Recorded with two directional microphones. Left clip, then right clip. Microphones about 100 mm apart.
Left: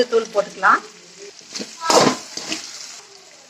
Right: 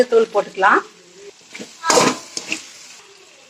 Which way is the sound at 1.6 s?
30° right (ahead or behind).